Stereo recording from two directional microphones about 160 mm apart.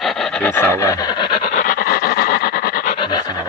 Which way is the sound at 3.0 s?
30° left (ahead or behind).